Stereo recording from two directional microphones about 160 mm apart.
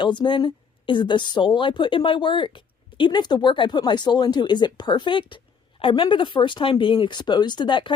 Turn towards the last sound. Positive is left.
turn(degrees=30)  # may be behind; listen again after turning